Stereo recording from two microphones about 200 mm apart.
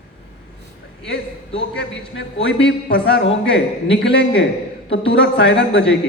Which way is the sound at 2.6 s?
55° left (ahead or behind).